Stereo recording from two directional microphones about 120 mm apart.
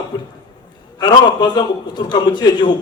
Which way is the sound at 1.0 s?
40° left (ahead or behind).